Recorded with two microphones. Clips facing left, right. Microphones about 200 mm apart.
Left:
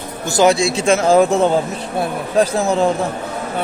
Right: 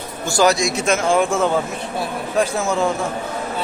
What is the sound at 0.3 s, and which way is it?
A man's voice, 20° left (ahead or behind).